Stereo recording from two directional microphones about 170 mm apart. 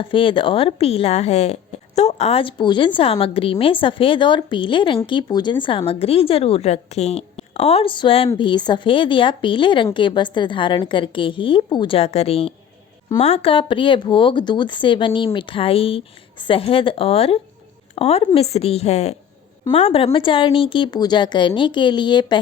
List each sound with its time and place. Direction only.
0.0 s a woman's voice: 30° left (ahead or behind)